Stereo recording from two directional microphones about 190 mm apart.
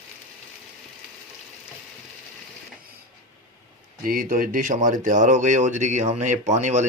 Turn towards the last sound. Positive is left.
turn(degrees=-35)  # may be behind; listen again after turning